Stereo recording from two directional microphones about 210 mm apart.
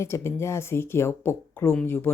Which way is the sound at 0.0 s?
10° left (ahead or behind).